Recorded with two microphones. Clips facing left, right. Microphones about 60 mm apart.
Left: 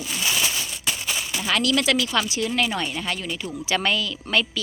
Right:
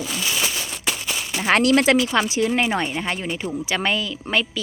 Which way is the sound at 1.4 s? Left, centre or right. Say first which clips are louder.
Right 6 dB; right.